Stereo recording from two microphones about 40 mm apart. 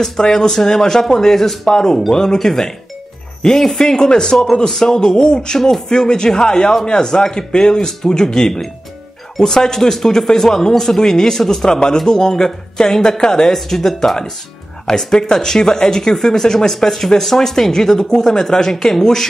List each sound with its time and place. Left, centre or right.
0.0 s speech: centre